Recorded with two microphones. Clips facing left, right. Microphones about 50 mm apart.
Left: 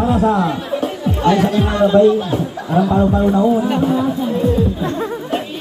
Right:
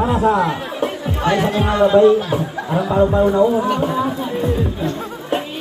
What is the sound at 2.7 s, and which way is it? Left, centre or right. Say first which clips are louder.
Speech: left 1 dB; centre.